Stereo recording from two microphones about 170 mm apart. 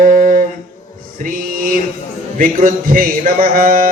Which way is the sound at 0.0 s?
55° right (ahead or behind).